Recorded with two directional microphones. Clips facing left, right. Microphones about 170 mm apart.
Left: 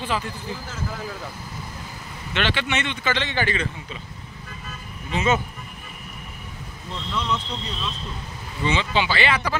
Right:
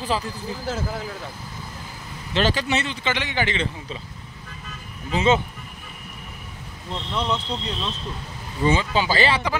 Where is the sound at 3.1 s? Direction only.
15° right (ahead or behind).